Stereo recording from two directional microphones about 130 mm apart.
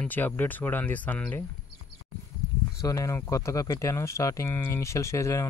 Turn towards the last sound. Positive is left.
turn(degrees=25)  # may be behind; listen again after turning